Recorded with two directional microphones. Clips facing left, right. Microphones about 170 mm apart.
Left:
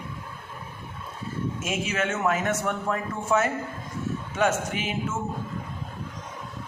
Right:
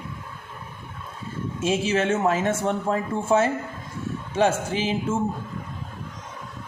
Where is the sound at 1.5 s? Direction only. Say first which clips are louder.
Right 8 dB; 30° right (ahead or behind).